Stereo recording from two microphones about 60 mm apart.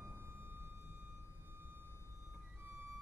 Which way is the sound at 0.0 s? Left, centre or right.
Right.